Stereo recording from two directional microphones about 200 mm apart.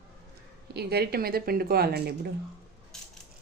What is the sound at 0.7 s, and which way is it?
Speech, 55° right (ahead or behind).